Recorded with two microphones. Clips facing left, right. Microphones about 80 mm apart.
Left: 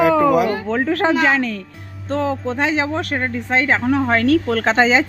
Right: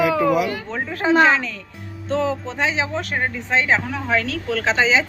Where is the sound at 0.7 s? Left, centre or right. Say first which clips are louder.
Left 2 dB; left.